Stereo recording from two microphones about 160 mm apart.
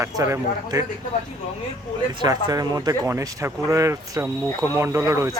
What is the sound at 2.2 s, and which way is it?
Speech, 25° right (ahead or behind).